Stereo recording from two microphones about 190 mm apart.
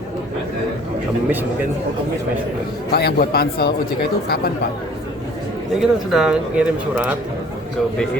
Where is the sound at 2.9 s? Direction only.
55° left (ahead or behind).